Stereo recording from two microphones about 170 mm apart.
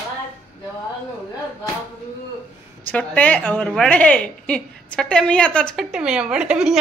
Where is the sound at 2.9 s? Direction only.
10° left (ahead or behind).